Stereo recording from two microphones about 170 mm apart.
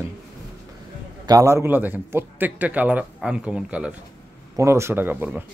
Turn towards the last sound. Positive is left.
turn(degrees=-10)  # may be behind; listen again after turning